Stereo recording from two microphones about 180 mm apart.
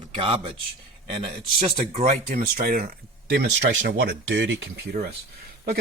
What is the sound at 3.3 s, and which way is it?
Speech, 70° right (ahead or behind).